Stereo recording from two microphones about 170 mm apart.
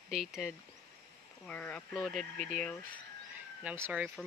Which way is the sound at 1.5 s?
10° left (ahead or behind).